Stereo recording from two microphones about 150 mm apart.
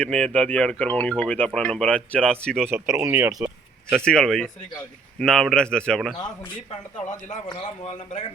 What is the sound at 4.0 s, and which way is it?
Speech, 5° left (ahead or behind).